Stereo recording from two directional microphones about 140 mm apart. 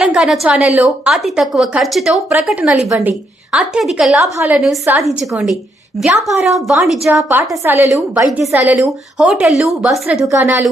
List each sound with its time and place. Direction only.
0.0 s a woman's voice: 5° right (ahead or behind)
5.0 s a woman's voice: centre (ahead or behind)
7.3 s a woman's voice: 15° right (ahead or behind)
7.9 s a woman's voice: 5° right (ahead or behind)
10.2 s a woman's voice: 15° right (ahead or behind)